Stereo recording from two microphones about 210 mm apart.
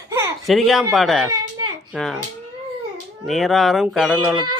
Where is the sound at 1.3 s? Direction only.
90° right.